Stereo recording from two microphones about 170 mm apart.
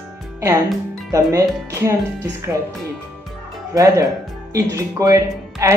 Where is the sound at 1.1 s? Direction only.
20° right (ahead or behind).